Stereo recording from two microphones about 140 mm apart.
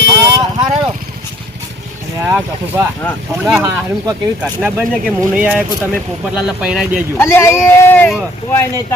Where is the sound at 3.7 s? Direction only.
30° right (ahead or behind).